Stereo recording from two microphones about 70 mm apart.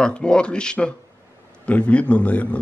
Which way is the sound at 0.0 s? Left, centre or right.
Centre.